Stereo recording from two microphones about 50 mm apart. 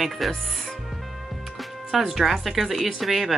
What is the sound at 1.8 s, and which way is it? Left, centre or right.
Speech, centre.